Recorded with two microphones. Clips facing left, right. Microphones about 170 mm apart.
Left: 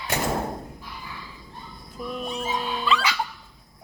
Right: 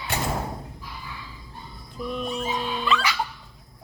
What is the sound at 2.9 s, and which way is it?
Speech, 15° left (ahead or behind).